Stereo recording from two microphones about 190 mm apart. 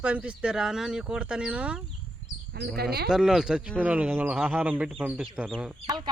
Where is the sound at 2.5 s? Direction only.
60° right (ahead or behind).